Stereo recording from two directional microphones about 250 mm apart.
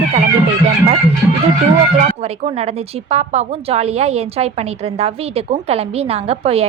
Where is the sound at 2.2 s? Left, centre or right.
Right.